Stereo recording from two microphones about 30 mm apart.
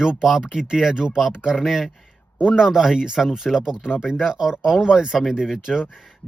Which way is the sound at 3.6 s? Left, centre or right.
Right.